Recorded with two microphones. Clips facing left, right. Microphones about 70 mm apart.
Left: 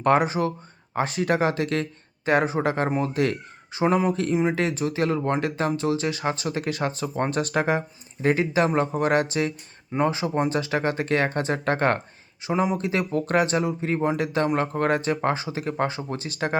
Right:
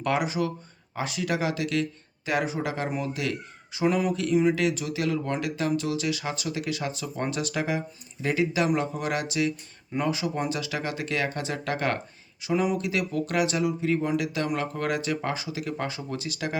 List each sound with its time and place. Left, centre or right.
0.0 s speech: left